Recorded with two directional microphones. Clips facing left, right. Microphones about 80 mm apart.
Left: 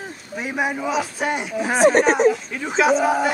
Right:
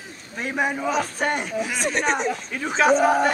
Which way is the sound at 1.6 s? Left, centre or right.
Left.